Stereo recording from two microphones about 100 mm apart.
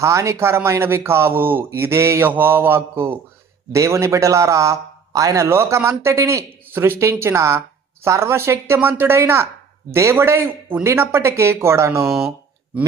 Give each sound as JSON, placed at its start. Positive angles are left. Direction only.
{"t": 0.0, "sound": "a man's voice", "side_deg": -30}
{"t": 12.0, "sound": "speech", "side_deg": 0}